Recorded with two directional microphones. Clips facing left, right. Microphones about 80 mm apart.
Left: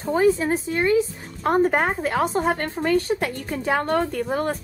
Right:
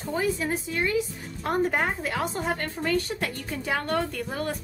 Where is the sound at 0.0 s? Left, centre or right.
Left.